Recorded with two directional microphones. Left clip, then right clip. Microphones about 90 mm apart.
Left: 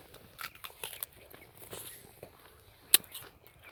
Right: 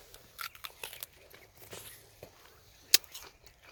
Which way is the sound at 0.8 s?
35° right (ahead or behind).